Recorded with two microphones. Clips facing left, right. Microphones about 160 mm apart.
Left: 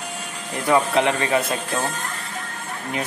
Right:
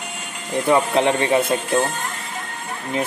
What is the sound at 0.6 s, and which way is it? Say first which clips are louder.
Speech: right 1 dB; 25° right (ahead or behind).